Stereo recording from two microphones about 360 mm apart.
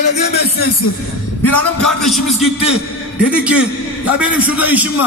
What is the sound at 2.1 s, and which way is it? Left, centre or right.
A man's voice, centre.